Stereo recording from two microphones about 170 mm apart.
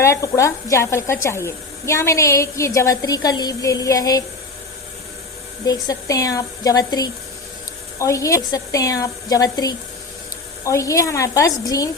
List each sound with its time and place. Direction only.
0.0 s a woman's voice: 15° left (ahead or behind)
5.6 s a woman's voice: 20° left (ahead or behind)